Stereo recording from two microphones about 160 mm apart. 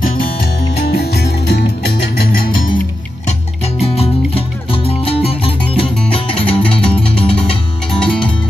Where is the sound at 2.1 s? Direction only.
65° left (ahead or behind).